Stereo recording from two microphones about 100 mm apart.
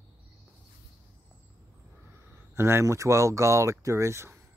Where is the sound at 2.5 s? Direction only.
25° right (ahead or behind).